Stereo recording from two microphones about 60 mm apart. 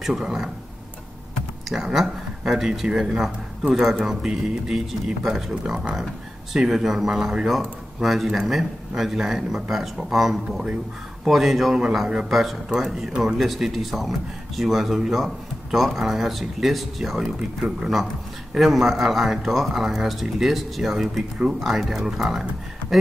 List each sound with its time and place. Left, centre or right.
0.0 s speech: centre
1.7 s speech: centre
18.5 s speech: centre